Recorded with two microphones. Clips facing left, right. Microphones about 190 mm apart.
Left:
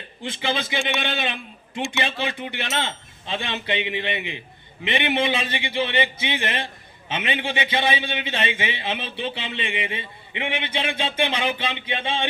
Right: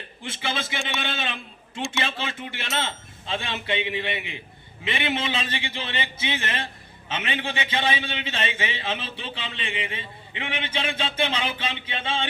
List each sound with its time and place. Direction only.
0.2 s a man's voice: 15° left (ahead or behind)